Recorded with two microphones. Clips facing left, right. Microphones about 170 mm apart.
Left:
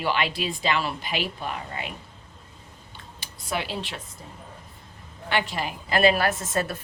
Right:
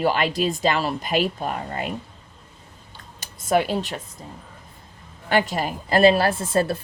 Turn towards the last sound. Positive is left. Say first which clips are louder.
# right 6 dB
turn(degrees=-30)  # may be behind; listen again after turning